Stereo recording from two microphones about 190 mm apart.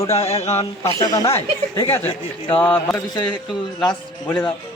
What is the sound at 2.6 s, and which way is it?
A man's voice, 10° left (ahead or behind).